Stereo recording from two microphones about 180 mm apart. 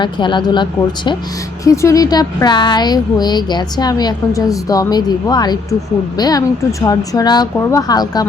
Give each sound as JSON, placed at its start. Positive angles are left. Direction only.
{"t": 0.0, "sound": "a woman's voice", "side_deg": 25}